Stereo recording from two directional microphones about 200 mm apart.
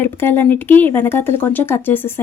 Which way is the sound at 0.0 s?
10° left (ahead or behind).